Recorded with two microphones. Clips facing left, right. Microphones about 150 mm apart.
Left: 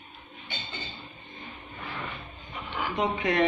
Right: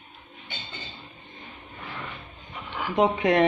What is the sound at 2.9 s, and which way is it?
Speech, 75° right (ahead or behind).